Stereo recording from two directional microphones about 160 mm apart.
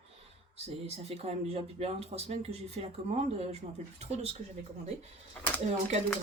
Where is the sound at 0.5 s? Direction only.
40° right (ahead or behind).